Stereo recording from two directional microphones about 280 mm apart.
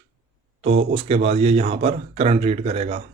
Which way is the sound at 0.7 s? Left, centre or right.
Right.